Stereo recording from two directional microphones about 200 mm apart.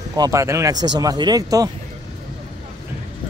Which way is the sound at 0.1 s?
15° right (ahead or behind).